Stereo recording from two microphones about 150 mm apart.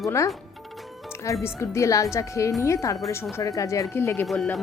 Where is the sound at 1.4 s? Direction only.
20° left (ahead or behind).